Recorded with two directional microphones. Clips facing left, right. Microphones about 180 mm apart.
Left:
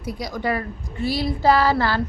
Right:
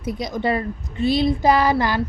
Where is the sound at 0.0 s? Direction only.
20° right (ahead or behind).